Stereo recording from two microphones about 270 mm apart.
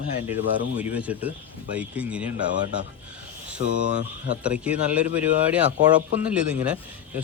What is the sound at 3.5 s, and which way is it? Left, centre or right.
Speech, right.